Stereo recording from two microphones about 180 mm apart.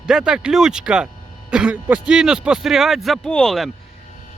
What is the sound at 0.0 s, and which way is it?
A man's voice, 5° right (ahead or behind).